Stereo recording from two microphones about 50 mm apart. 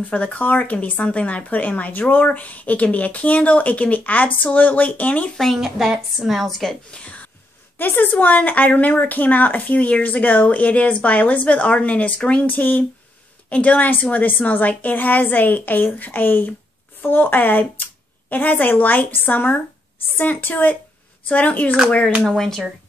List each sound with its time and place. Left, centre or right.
0.1 s speech: left
5.4 s a woman's voice: centre
6.9 s speech: left
7.8 s speech: left
22.3 s speech: centre